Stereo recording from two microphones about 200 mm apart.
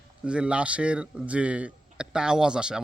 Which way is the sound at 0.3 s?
5° right (ahead or behind).